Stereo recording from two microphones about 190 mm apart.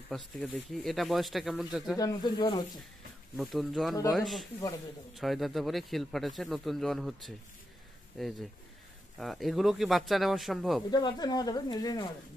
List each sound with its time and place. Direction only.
0.1 s speech: centre (ahead or behind)
2.0 s speech: 20° left (ahead or behind)
3.3 s speech: centre (ahead or behind)
10.9 s speech: 20° left (ahead or behind)